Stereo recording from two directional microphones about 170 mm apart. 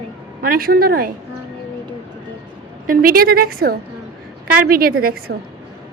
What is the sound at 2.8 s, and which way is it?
A woman's voice, 55° right (ahead or behind).